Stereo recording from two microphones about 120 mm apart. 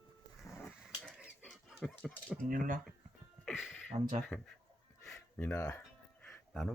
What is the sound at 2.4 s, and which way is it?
Speech, 90° right.